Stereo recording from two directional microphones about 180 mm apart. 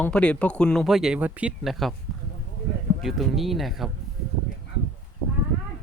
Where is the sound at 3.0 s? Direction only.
Centre (ahead or behind).